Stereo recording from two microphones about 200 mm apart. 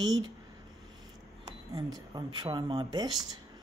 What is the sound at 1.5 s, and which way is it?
Speech, 20° right (ahead or behind).